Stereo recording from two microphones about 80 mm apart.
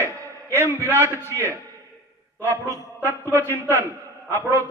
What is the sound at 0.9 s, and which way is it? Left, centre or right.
Speech, right.